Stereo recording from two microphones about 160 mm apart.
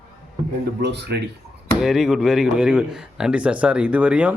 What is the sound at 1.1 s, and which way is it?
Speech, 90° right.